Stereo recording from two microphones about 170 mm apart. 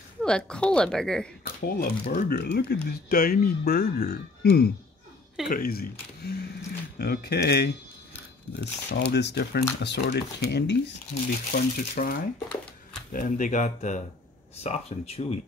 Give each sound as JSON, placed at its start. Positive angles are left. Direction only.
{"t": 0.2, "sound": "a woman's voice", "side_deg": 5}
{"t": 1.4, "sound": "speech", "side_deg": 60}
{"t": 8.5, "sound": "speech", "side_deg": 85}
{"t": 9.8, "sound": "speech", "side_deg": 85}
{"t": 11.5, "sound": "speech", "side_deg": 60}
{"t": 13.1, "sound": "speech", "side_deg": 50}